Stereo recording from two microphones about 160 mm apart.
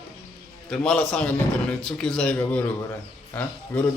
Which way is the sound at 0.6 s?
5° left (ahead or behind).